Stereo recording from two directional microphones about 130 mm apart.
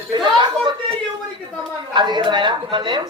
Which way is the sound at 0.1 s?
35° right (ahead or behind).